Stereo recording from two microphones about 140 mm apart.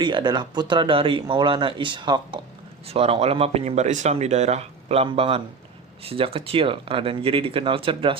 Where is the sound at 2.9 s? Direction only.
45° right (ahead or behind).